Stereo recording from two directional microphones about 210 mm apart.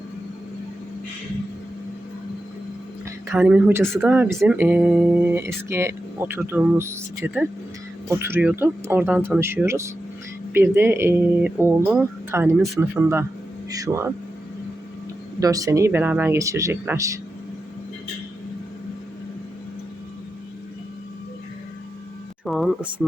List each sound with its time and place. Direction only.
3.3 s speech: 5° right (ahead or behind)
15.4 s speech: 15° right (ahead or behind)
22.4 s speech: centre (ahead or behind)